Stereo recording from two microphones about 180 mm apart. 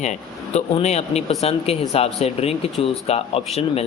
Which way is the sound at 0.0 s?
40° left (ahead or behind).